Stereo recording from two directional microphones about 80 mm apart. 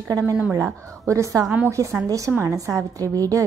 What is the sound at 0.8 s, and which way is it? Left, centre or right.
A woman's voice, right.